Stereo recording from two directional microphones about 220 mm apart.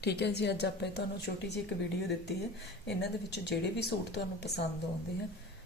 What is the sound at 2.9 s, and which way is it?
Speech, 50° left (ahead or behind).